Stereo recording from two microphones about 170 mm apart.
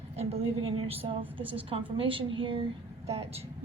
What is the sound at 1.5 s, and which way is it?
A woman's voice, 30° right (ahead or behind).